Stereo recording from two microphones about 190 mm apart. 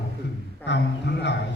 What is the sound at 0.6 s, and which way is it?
Speech, 65° left (ahead or behind).